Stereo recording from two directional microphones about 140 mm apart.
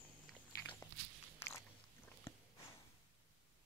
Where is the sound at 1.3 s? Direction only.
20° left (ahead or behind).